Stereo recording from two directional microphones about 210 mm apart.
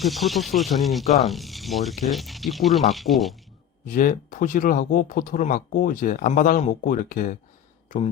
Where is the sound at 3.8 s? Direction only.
40° left (ahead or behind).